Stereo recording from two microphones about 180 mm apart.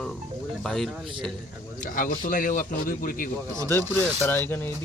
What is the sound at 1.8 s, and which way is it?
Speech, 50° left (ahead or behind).